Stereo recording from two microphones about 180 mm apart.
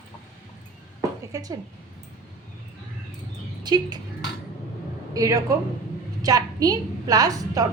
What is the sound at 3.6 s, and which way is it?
Speech, 25° right (ahead or behind).